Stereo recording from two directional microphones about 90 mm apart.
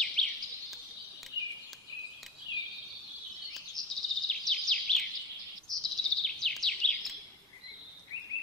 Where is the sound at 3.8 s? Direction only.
5° left (ahead or behind).